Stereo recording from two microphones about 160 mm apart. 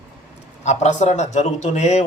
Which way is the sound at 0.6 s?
45° left (ahead or behind).